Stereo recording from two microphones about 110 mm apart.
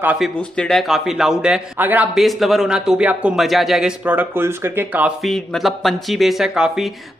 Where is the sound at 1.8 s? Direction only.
15° right (ahead or behind).